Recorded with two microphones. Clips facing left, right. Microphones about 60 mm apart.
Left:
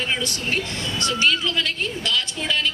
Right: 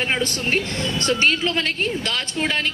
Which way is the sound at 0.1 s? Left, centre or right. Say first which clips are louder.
Right 3 dB; right.